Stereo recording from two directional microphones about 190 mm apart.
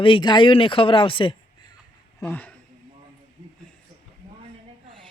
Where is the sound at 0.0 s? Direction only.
25° left (ahead or behind).